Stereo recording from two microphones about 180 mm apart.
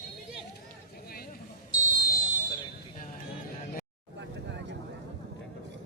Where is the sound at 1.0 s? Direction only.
55° left (ahead or behind).